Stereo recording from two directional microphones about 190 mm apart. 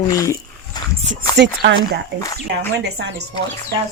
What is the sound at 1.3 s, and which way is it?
Speech, 65° right (ahead or behind).